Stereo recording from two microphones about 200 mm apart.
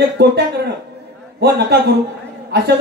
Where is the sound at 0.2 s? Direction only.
55° right (ahead or behind).